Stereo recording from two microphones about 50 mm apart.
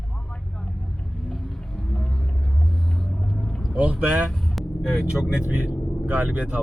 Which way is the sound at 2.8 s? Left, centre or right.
Centre.